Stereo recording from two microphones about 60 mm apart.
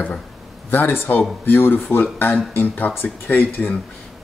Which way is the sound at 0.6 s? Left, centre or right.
Left.